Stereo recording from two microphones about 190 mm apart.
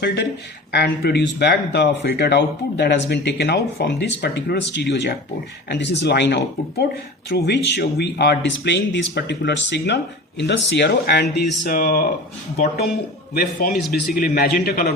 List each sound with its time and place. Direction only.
0.0 s a man's voice: 65° left (ahead or behind)